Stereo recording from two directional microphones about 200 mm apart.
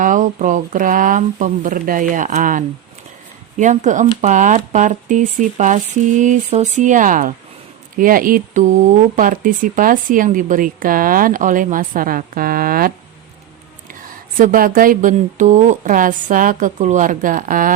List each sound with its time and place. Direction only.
0.0 s speech: 40° right (ahead or behind)
14.3 s speech: 45° right (ahead or behind)